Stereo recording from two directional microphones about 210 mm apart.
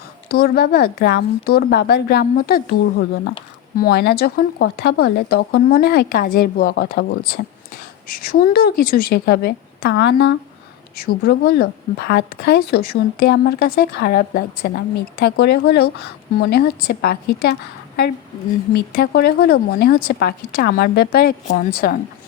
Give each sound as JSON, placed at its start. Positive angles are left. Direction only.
{"t": 0.3, "sound": "speech", "side_deg": 50}